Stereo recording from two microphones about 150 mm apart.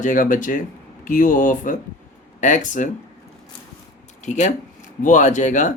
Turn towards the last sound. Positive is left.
turn(degrees=55)  # may be behind; listen again after turning